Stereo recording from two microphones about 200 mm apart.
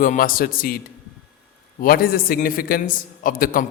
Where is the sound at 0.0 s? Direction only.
45° left (ahead or behind).